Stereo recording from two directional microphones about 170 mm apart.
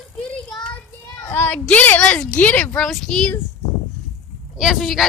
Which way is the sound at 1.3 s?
15° left (ahead or behind).